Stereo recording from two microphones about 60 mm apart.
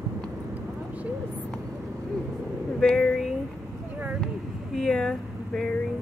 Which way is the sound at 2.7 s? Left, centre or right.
Centre.